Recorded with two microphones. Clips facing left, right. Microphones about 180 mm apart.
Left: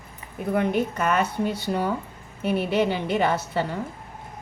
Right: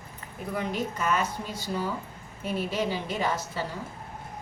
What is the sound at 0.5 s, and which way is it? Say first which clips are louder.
A woman's voice: left 7 dB; 60° left (ahead or behind).